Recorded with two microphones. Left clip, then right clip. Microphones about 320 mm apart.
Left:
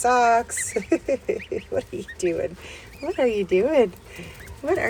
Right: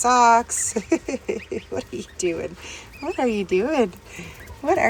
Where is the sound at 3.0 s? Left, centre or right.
Right.